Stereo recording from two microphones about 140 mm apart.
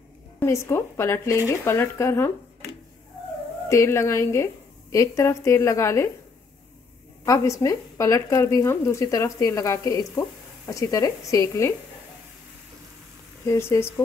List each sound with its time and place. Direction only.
0.4 s speech: 20° left (ahead or behind)
3.6 s speech: 20° left (ahead or behind)
7.2 s speech: 25° left (ahead or behind)
13.5 s speech: 20° left (ahead or behind)